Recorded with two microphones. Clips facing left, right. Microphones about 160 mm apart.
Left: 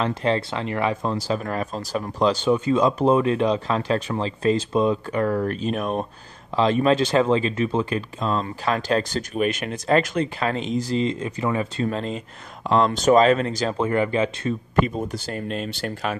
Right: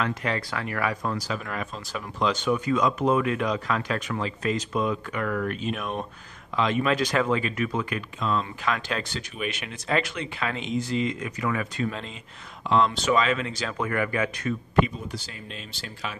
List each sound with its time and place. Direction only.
0.0 s speech: 30° left (ahead or behind)
1.4 s speech: 40° left (ahead or behind)
14.8 s speech: 50° left (ahead or behind)